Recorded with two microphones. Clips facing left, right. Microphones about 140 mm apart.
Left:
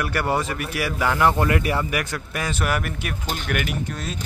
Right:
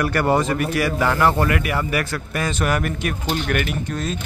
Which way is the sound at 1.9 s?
15° left (ahead or behind).